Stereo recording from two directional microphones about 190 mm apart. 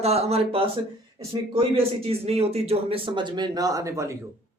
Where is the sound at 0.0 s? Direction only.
35° right (ahead or behind).